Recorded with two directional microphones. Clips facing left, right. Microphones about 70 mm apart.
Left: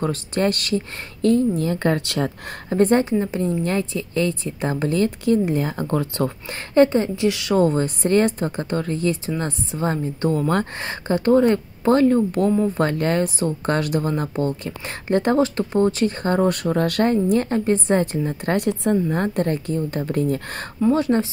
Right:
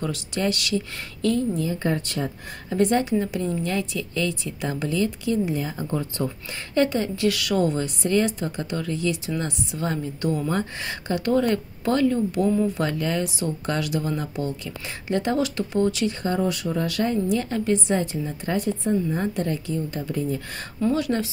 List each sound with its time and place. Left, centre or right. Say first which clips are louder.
0.0 s speech: left 5 dB; left
1.8 s speech: left 4 dB; left
2.7 s speech: left 4 dB; left
5.9 s speech: left 5 dB; left
6.7 s a woman's voice: left 6 dB; left
7.6 s speech: left 5 dB; left
11.1 s speech: left 5 dB; left
19.0 s speech: left 4 dB; left
20.9 s a woman's voice: left 6 dB; left